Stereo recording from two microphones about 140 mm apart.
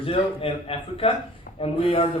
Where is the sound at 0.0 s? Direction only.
40° left (ahead or behind).